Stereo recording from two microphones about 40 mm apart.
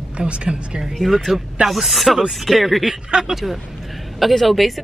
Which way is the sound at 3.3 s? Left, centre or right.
Centre.